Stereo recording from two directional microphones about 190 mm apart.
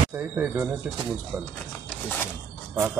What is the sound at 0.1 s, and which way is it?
Speech, 10° right (ahead or behind).